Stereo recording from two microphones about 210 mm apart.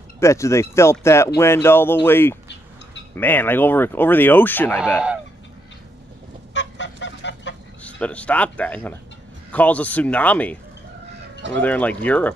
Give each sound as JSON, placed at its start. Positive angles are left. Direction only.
{"t": 0.2, "sound": "speech", "side_deg": 15}
{"t": 6.5, "sound": "goose", "side_deg": 60}
{"t": 7.8, "sound": "speech", "side_deg": 5}